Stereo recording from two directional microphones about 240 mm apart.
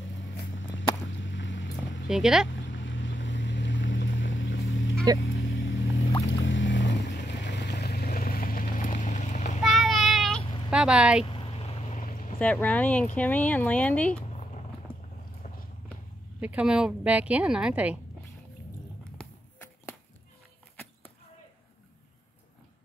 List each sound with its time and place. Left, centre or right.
0.2 s a sound: left
2.0 s a woman's voice: centre
2.5 s vehicle: left
9.6 s child singing: centre
10.7 s a woman's voice: centre
11.2 s boat: left
12.4 s a woman's voice: centre
16.3 s a woman's voice: centre
19.1 s a sound: centre